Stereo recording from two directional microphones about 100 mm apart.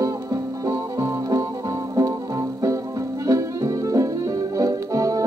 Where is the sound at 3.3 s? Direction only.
35° right (ahead or behind).